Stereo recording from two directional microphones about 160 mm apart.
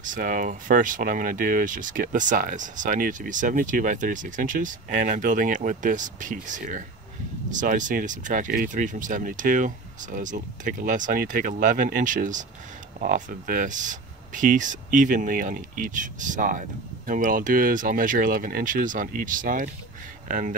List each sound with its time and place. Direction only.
0.0 s speech: 55° right (ahead or behind)